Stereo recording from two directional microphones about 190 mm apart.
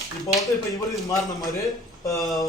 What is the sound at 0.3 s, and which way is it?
Speech, centre (ahead or behind).